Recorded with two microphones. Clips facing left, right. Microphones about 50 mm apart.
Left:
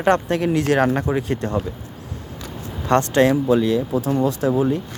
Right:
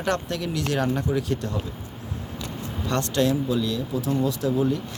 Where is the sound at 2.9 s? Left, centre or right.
Left.